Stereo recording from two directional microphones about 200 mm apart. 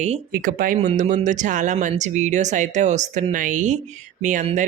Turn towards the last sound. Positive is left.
turn(degrees=-40)  # may be behind; listen again after turning